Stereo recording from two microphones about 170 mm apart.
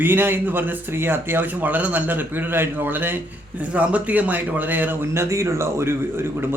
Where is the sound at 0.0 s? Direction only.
10° right (ahead or behind).